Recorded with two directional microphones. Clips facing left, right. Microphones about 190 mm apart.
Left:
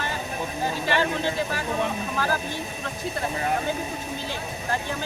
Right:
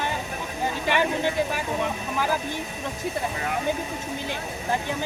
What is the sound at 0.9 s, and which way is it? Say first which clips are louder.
Speech: right 2 dB; 15° right (ahead or behind).